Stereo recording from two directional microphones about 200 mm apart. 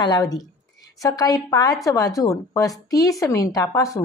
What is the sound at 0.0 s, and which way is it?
A woman's voice, 20° left (ahead or behind).